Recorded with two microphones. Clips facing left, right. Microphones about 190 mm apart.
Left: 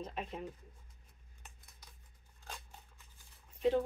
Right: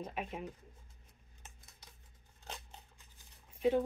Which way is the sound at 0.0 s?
10° right (ahead or behind).